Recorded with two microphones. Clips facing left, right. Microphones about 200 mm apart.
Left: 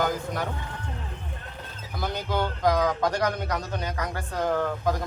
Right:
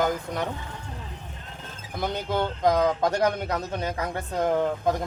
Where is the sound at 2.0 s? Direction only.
25° right (ahead or behind).